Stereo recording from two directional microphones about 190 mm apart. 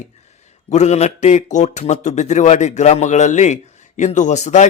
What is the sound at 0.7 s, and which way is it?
A man's voice, 35° left (ahead or behind).